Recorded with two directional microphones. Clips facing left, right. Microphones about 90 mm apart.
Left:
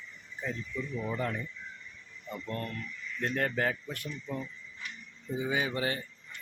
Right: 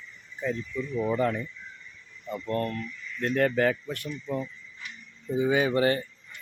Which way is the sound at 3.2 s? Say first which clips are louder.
Right 7 dB; 90° right.